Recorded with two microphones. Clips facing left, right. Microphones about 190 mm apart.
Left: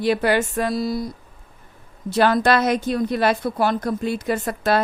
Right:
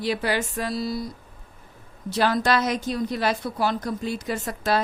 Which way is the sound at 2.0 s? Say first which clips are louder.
Left 5 dB; 55° left (ahead or behind).